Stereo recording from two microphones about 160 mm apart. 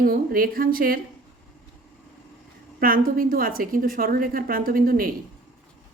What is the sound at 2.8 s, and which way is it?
A woman's voice, 65° right (ahead or behind).